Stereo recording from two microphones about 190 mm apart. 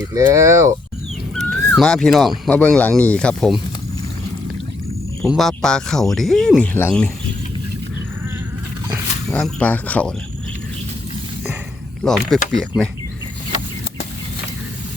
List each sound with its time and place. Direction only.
0.1 s speech: 15° right (ahead or behind)
1.4 s speech: centre (ahead or behind)
5.2 s speech: centre (ahead or behind)
9.3 s speech: 5° left (ahead or behind)
12.0 s speech: centre (ahead or behind)